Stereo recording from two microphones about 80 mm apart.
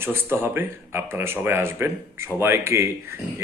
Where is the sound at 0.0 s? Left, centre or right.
Right.